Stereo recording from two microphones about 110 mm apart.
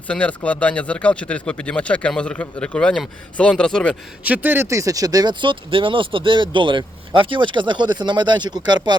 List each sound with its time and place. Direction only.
0.1 s speech: 10° left (ahead or behind)
4.2 s speech: 15° right (ahead or behind); by 9.0 s 40° right (ahead or behind)